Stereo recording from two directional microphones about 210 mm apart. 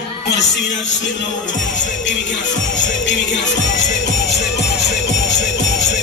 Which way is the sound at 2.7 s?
60° left (ahead or behind).